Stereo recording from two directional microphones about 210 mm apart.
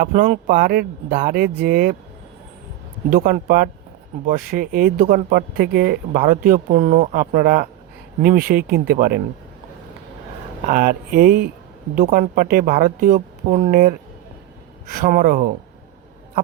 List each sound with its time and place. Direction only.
0.1 s speech: 35° right (ahead or behind)
3.1 s speech: 40° right (ahead or behind)
10.7 s speech: 45° right (ahead or behind)
15.0 s speech: 45° right (ahead or behind)